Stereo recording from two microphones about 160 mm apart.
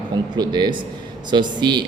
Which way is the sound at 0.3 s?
25° right (ahead or behind).